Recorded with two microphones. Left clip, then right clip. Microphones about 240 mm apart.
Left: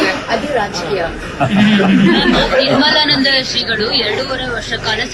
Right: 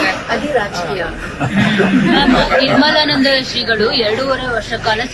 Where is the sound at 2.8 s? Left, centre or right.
Centre.